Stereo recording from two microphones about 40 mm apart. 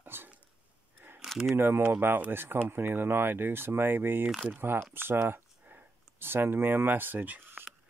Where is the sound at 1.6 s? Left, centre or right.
Right.